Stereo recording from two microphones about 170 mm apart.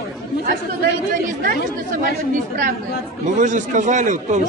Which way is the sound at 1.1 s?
55° right (ahead or behind).